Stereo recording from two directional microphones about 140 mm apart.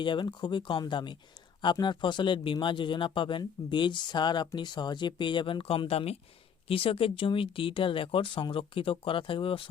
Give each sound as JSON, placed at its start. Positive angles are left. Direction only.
{"t": 0.0, "sound": "speech", "side_deg": 35}